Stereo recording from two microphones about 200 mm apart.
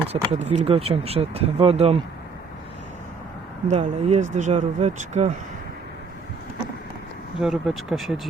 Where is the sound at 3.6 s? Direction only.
35° right (ahead or behind).